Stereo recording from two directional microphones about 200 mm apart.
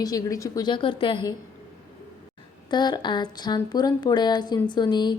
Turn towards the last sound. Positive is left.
turn(degrees=20)  # may be behind; listen again after turning